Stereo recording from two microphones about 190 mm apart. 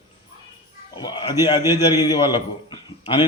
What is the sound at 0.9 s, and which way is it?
A man's voice, 25° left (ahead or behind).